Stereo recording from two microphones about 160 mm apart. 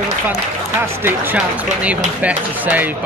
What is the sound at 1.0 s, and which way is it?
Speech, 10° right (ahead or behind).